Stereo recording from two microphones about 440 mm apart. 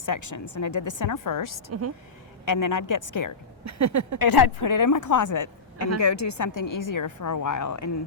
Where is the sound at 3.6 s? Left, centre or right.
Right.